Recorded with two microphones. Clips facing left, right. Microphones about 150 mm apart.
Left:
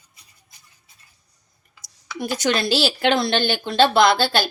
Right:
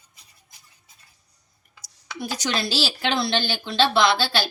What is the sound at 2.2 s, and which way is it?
Speech, 50° left (ahead or behind).